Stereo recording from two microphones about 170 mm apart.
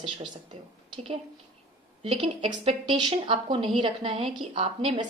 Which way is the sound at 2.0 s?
30° right (ahead or behind).